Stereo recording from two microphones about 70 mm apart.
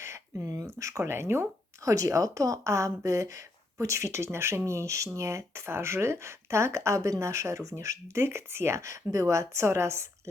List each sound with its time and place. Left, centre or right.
0.0 s a sound: right
0.5 s speech: right
1.8 s speech: right